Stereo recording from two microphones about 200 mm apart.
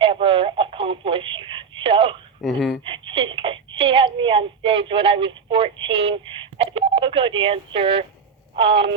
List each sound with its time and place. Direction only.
0.0 s telephone: 25° right (ahead or behind)
2.4 s speech: centre (ahead or behind)
2.8 s a sound: 25° right (ahead or behind)
5.5 s telephone dialing: 25° right (ahead or behind)
8.5 s telephone: 25° right (ahead or behind)